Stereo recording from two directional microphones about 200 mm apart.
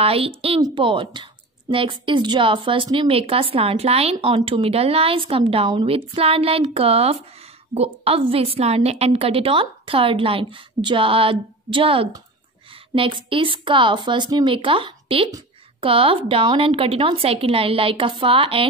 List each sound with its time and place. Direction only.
0.0 s speech: 30° right (ahead or behind)